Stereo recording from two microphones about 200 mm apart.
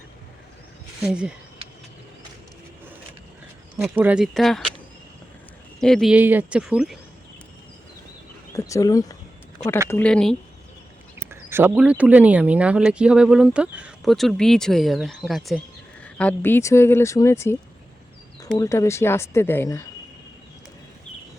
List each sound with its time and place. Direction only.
1.0 s speech: 5° right (ahead or behind)
3.8 s speech: 5° right (ahead or behind)
5.8 s speech: centre (ahead or behind)
8.5 s speech: 15° left (ahead or behind)
9.9 s speech: 5° left (ahead or behind)
11.2 s speech: 10° right (ahead or behind); by 19.8 s 15° left (ahead or behind)